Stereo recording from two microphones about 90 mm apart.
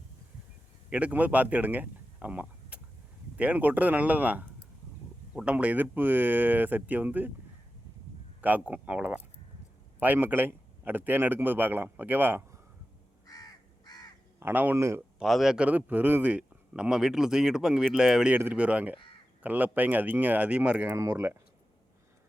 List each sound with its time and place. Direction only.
0.9 s a man's voice: 15° right (ahead or behind)
8.4 s a man's voice: 20° right (ahead or behind)
13.2 s crow: 45° left (ahead or behind)
14.3 s speech: 20° right (ahead or behind)
14.8 s speech: 35° right (ahead or behind)
15.2 s a man's voice: 5° right (ahead or behind)
20.9 s speech: 30° right (ahead or behind)